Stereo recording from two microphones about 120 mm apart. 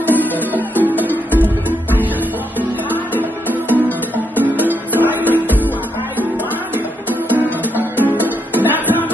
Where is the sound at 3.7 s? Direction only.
15° left (ahead or behind).